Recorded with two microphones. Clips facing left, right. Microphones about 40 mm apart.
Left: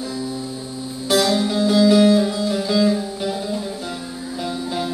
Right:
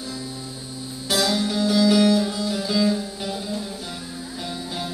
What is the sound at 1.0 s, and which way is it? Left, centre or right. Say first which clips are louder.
Music: left 4 dB; centre.